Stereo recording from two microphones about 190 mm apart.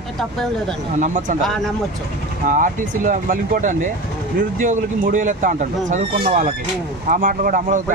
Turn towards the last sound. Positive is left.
turn(degrees=-45)  # may be behind; listen again after turning